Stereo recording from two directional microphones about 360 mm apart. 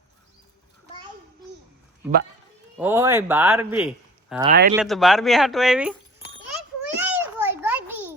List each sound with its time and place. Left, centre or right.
2.7 s speech: centre
4.4 s speech: right
4.7 s speech: centre
6.8 s a sound: centre